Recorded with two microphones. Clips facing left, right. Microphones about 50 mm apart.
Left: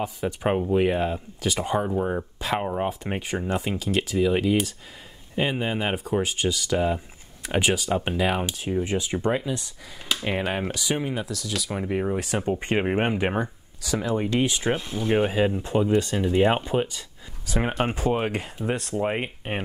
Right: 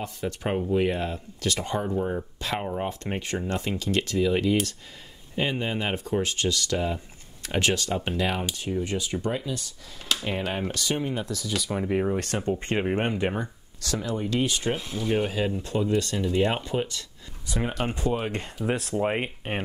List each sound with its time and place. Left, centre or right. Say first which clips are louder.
0.0 s speech: left 4 dB; centre; by 14.5 s left
14.5 s speech: left 2 dB; centre
18.7 s speech: even; centre